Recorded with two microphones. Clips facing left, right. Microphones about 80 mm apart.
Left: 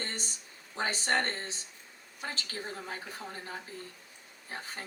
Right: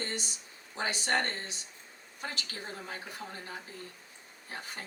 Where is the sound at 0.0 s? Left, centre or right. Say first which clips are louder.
Right 2 dB; left.